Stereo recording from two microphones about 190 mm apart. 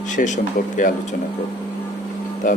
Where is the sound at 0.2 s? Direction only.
45° left (ahead or behind).